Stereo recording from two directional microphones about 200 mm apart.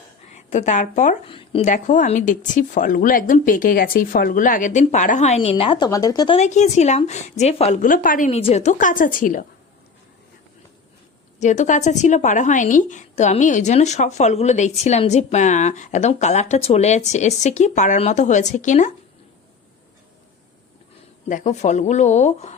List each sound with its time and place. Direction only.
0.3 s a woman's voice: 35° left (ahead or behind)
1.3 s speech: 25° left (ahead or behind)
1.7 s a woman's voice: 40° left (ahead or behind); by 6.3 s 20° left (ahead or behind)
6.3 s a woman's voice: 35° left (ahead or behind)
11.3 s a woman's voice: 35° left (ahead or behind)
21.2 s a woman's voice: 40° left (ahead or behind)